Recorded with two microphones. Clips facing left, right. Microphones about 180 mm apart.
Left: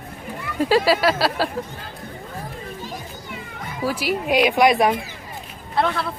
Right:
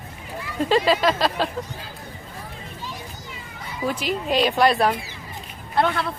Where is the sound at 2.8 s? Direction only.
50° left (ahead or behind).